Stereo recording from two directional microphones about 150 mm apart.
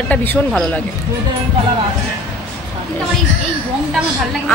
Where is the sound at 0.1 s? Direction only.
10° left (ahead or behind).